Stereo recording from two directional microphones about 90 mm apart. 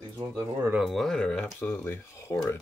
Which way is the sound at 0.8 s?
Centre (ahead or behind).